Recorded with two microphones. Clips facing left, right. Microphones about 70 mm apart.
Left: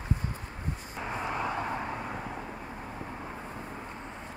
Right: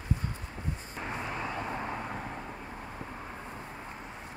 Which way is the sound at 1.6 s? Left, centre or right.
Centre.